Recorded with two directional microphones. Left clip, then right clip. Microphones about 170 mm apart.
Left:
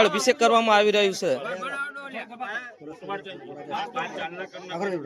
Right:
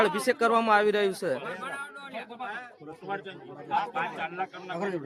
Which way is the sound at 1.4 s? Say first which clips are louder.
Left 5 dB; 30° right (ahead or behind).